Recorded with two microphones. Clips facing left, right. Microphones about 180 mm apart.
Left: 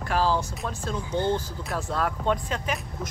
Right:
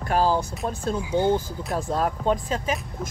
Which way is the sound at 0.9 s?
10° right (ahead or behind).